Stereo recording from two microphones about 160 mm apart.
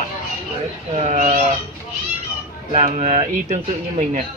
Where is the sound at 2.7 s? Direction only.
45° right (ahead or behind).